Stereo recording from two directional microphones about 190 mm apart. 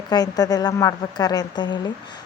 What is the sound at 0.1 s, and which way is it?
Speech, 20° left (ahead or behind).